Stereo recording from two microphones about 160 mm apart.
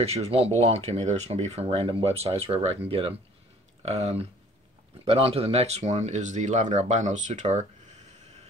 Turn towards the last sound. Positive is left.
turn(degrees=-45)  # may be behind; listen again after turning